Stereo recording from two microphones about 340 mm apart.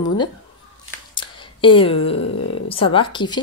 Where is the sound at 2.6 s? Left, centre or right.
Centre.